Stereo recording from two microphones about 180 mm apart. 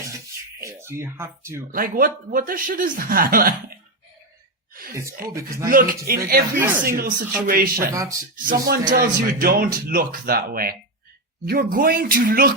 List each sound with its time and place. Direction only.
0.6 s speech: 15° right (ahead or behind)
1.7 s a man's voice: 50° right (ahead or behind)
4.7 s a sound: 55° right (ahead or behind)
5.2 s a man's voice: 55° right (ahead or behind)
7.9 s speech: 15° right (ahead or behind)
8.4 s a man's voice: 55° right (ahead or behind)